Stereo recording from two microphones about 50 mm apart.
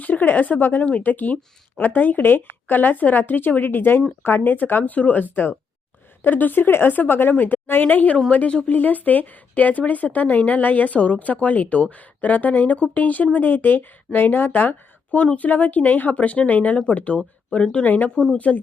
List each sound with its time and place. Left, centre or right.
0.0 s a woman's voice: left
8.7 s speech: left
17.8 s speech: left